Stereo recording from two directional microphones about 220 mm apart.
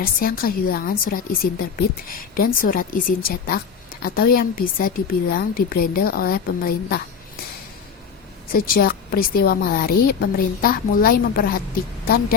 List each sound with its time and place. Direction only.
0.0 s a woman's voice: 40° left (ahead or behind)
8.5 s a woman's voice: 40° left (ahead or behind)